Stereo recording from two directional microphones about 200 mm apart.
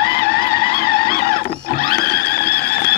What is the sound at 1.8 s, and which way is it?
Music, 50° left (ahead or behind).